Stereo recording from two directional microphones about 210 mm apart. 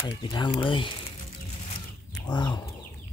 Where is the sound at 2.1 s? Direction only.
20° left (ahead or behind).